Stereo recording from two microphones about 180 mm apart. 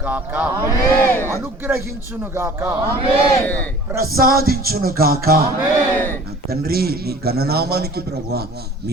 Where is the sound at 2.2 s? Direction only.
15° right (ahead or behind).